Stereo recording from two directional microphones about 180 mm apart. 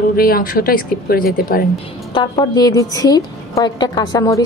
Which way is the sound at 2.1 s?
25° left (ahead or behind).